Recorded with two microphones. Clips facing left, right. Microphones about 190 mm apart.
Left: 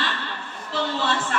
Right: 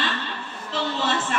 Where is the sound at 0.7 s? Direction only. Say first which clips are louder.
Even; 20° right (ahead or behind).